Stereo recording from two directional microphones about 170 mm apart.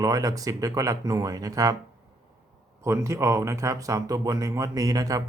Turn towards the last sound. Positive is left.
turn(degrees=-20)  # may be behind; listen again after turning